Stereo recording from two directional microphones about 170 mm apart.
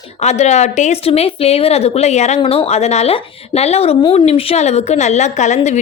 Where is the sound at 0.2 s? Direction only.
40° left (ahead or behind).